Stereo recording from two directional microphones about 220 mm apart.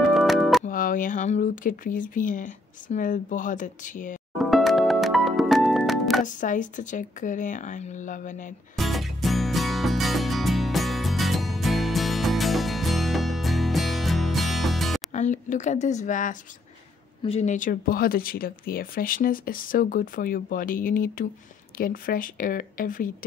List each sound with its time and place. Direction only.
0.1 s music: centre (ahead or behind)
0.7 s speech: 40° left (ahead or behind)
4.4 s music: centre (ahead or behind)
6.2 s speech: 35° left (ahead or behind)
8.7 s music: centre (ahead or behind)
15.1 s speech: 35° left (ahead or behind)